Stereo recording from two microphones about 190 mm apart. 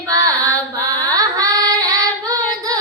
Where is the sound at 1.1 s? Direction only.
20° right (ahead or behind).